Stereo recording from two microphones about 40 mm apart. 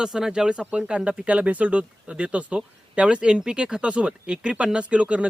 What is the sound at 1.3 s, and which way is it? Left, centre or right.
Speech, right.